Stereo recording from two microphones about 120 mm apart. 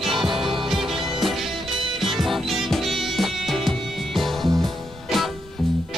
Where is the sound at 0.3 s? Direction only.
45° right (ahead or behind).